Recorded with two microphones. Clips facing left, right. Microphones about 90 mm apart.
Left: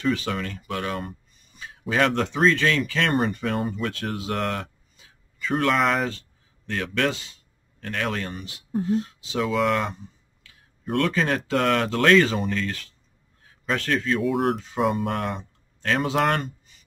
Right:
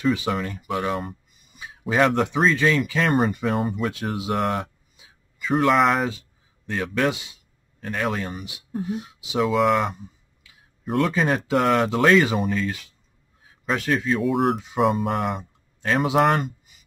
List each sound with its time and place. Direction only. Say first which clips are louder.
0.0 s speech: right 2 dB; 15° right (ahead or behind)
3.1 s speech: right 2 dB; centre (ahead or behind)
4.6 s a sound: right 4 dB; 15° right (ahead or behind)
5.6 s speech: right 3 dB; 5° right (ahead or behind)
6.0 s speech: right 2 dB; 15° right (ahead or behind)
9.4 s speech: right 3 dB; centre (ahead or behind)